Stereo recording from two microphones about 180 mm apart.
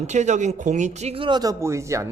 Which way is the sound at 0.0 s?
40° right (ahead or behind).